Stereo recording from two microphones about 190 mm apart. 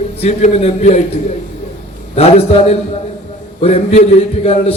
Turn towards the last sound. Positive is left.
turn(degrees=35)  # may be behind; listen again after turning